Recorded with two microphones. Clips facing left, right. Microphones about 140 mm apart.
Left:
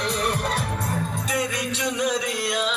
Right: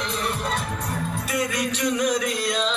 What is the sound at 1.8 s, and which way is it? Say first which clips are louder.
Music: right 2 dB; 25° left (ahead or behind).